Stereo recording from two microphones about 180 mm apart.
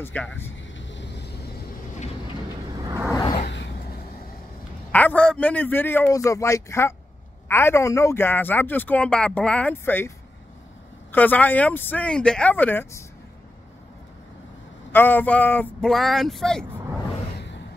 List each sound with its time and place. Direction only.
0.0 s a man's voice: 10° left (ahead or behind)
0.7 s vehicle: 85° left; by 1.5 s 70° left (ahead or behind)
3.1 s a sound: 20° left (ahead or behind)
3.3 s a sound: 70° left (ahead or behind)
4.9 s a man's voice: 5° left (ahead or behind)
14.9 s speech: 10° left (ahead or behind)